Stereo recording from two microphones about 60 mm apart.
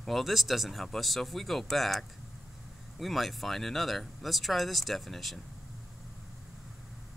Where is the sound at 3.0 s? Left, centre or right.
Centre.